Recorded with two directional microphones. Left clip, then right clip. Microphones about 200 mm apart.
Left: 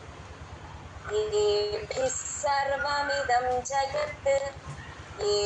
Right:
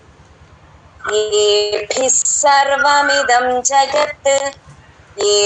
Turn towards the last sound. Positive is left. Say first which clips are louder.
# right 13 dB
turn(degrees=-45)  # may be behind; listen again after turning